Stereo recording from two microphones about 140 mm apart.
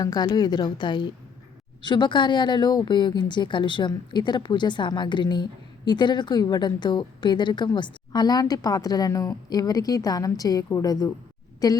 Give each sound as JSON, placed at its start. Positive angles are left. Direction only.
{"t": 0.0, "sound": "a woman's voice", "side_deg": 30}